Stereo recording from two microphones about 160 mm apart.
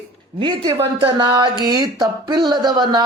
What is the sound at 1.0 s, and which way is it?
A man's voice, 30° right (ahead or behind).